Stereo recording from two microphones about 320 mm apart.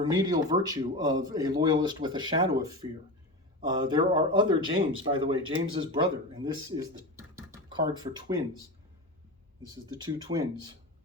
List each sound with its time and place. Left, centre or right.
0.1 s speech: centre
9.9 s speech: centre